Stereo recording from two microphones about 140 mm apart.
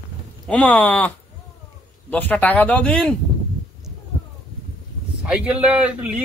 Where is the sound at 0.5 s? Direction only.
10° left (ahead or behind).